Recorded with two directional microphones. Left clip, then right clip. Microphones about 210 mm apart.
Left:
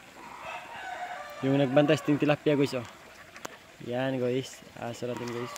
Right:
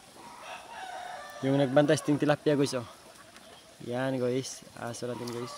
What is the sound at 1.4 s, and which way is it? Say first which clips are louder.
Speech: left 1 dB; centre (ahead or behind).